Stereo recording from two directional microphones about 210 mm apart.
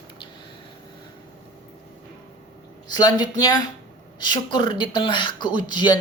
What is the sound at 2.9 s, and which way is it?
Speech, 20° left (ahead or behind).